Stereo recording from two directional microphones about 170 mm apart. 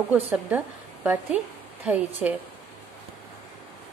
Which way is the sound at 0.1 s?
10° right (ahead or behind).